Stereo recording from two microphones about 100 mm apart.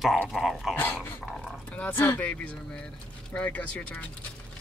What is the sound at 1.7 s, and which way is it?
Speech, 15° left (ahead or behind).